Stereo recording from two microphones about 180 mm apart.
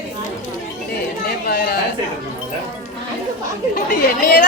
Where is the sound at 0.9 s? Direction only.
60° left (ahead or behind).